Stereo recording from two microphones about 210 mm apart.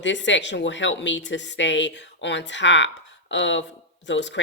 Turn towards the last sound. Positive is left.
turn(degrees=60)  # may be behind; listen again after turning